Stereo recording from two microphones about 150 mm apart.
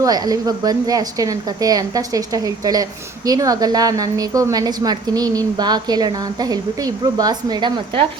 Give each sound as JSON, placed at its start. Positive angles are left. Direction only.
{"t": 0.0, "sound": "a woman's voice", "side_deg": -25}